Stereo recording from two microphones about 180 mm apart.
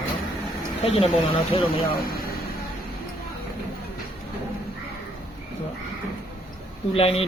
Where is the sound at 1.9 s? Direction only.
55° left (ahead or behind).